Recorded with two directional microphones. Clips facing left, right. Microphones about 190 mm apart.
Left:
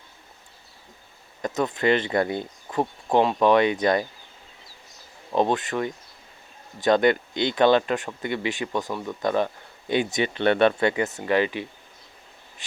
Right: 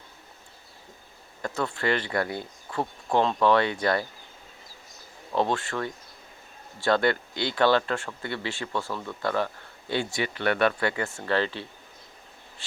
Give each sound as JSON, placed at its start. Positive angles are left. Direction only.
{"t": 1.4, "sound": "speech", "side_deg": 20}
{"t": 5.3, "sound": "speech", "side_deg": 15}